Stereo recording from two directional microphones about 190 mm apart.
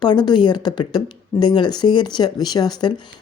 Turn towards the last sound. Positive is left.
turn(degrees=20)  # may be behind; listen again after turning